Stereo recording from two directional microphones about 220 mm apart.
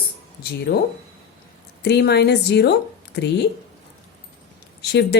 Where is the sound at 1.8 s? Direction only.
50° left (ahead or behind).